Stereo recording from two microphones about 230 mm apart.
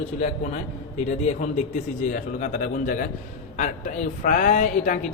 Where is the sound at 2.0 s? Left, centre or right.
Left.